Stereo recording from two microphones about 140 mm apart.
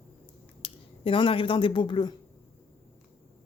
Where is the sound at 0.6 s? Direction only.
40° left (ahead or behind).